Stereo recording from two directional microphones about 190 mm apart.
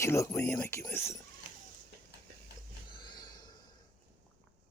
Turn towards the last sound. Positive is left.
turn(degrees=20)  # may be behind; listen again after turning